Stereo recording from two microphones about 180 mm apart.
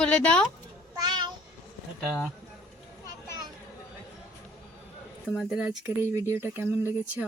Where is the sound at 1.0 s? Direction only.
25° right (ahead or behind).